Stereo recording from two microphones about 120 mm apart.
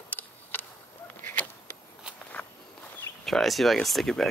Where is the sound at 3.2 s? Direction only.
Centre (ahead or behind).